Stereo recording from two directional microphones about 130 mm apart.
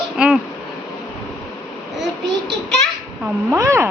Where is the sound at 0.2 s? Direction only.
5° right (ahead or behind).